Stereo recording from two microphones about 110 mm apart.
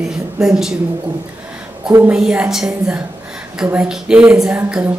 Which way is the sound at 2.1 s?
10° right (ahead or behind).